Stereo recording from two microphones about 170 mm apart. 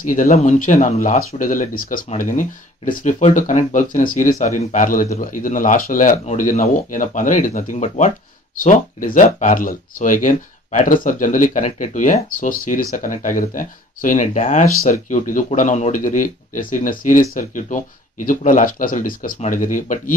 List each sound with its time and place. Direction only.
0.0 s speech: 50° left (ahead or behind)